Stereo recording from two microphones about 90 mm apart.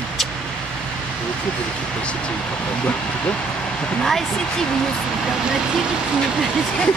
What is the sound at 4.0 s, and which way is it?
Speech, 5° left (ahead or behind).